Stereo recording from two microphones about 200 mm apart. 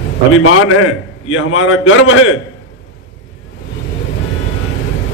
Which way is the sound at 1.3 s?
90° left.